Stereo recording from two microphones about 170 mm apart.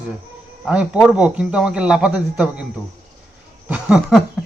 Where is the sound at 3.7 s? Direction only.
5° right (ahead or behind).